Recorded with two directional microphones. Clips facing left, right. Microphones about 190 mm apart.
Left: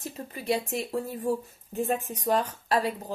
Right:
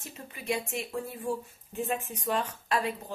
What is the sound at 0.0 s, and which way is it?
Speech, 35° left (ahead or behind).